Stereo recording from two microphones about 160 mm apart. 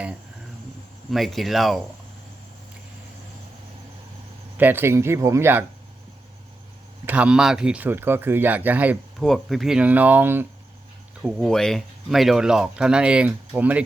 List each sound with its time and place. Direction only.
1.1 s speech: centre (ahead or behind)
4.5 s speech: 10° right (ahead or behind)
7.0 s speech: 10° right (ahead or behind)
9.2 s speech: centre (ahead or behind)